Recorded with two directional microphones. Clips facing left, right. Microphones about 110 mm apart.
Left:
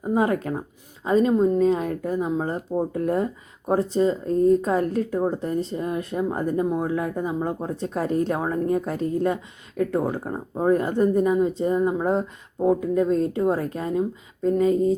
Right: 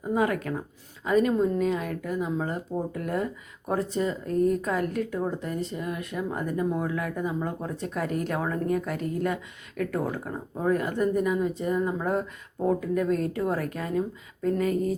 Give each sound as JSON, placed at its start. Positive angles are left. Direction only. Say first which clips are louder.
{"t": 0.0, "sound": "speech", "louder": "left 4 dB", "side_deg": 25}